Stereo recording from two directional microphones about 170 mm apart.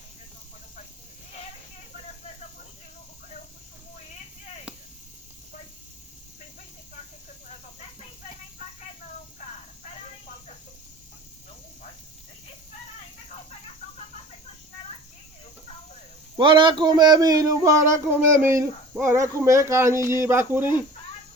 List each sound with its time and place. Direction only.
16.4 s speech: 30° right (ahead or behind); by 20.7 s 15° right (ahead or behind)